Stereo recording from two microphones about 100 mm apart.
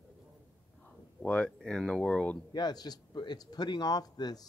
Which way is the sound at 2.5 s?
45° left (ahead or behind).